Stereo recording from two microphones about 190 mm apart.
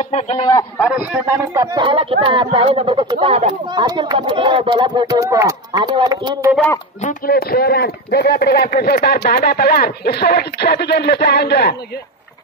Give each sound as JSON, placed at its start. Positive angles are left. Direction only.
{"t": 0.4, "sound": "speech", "side_deg": 20}
{"t": 0.8, "sound": "speech", "side_deg": -5}
{"t": 7.0, "sound": "speech", "side_deg": 45}